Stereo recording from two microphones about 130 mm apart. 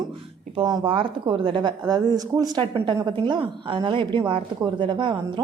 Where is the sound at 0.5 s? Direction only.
35° right (ahead or behind).